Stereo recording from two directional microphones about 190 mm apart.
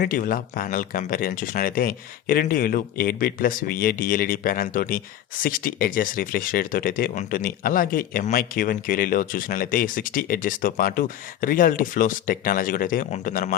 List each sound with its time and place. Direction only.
0.0 s speech: 45° left (ahead or behind)